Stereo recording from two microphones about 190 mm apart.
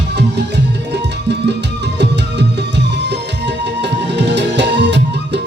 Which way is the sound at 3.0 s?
65° right (ahead or behind).